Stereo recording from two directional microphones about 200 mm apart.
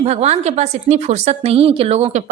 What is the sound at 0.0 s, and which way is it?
A woman's voice, 30° right (ahead or behind).